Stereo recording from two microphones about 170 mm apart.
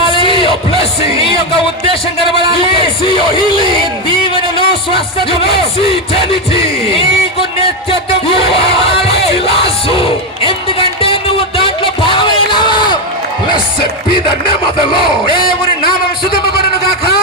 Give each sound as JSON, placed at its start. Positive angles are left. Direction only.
{"t": 0.1, "sound": "a sound", "side_deg": 30}
{"t": 2.6, "sound": "speech", "side_deg": 30}
{"t": 4.5, "sound": "music", "side_deg": 30}
{"t": 14.9, "sound": "speech", "side_deg": 30}